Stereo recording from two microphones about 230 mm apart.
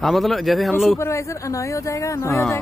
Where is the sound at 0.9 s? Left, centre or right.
Centre.